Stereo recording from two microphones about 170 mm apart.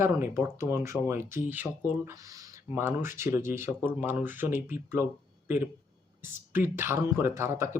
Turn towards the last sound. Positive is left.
turn(degrees=-15)  # may be behind; listen again after turning